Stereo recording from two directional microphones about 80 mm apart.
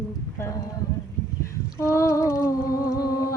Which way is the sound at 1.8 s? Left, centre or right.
Left.